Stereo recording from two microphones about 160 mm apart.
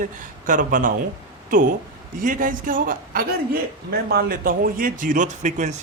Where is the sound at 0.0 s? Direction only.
55° right (ahead or behind).